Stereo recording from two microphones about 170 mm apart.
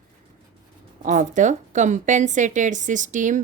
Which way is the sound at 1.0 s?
45° right (ahead or behind).